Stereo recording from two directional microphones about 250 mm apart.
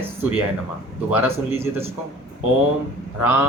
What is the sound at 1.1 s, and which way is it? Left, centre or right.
Speech, centre.